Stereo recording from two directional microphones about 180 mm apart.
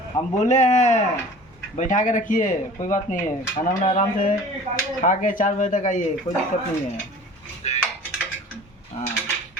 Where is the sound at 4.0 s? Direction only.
45° left (ahead or behind).